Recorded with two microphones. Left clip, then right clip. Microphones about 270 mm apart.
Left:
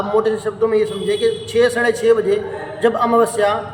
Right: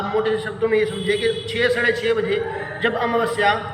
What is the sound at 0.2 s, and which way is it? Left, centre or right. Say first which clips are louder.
A man's voice: left 3 dB; centre.